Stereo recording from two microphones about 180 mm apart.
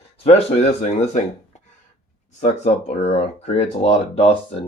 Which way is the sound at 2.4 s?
40° left (ahead or behind).